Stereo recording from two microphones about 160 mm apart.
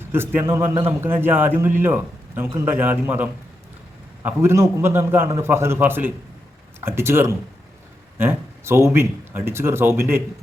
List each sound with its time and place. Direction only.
0.1 s a man's voice: 15° right (ahead or behind)